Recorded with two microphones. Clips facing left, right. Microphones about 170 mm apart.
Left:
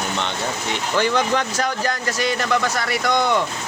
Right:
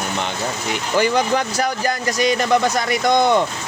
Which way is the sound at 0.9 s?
10° right (ahead or behind).